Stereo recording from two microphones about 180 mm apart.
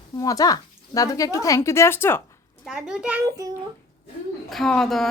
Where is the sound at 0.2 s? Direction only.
20° left (ahead or behind).